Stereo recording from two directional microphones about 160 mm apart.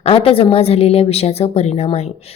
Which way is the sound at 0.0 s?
35° left (ahead or behind).